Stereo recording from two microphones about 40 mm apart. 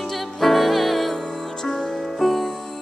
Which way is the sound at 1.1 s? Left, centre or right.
Centre.